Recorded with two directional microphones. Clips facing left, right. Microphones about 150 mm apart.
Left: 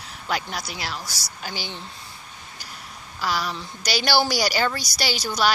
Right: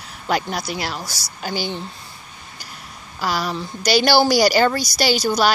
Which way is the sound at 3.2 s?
40° right (ahead or behind).